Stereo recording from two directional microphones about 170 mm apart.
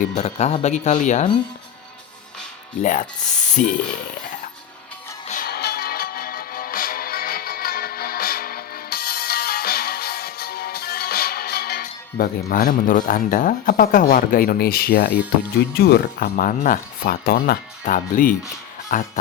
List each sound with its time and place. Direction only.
0.2 s speech: 40° left (ahead or behind)
2.8 s speech: 50° left (ahead or behind)
5.3 s music: 60° left (ahead or behind)
15.5 s speech: 70° left (ahead or behind); by 19.2 s 50° left (ahead or behind)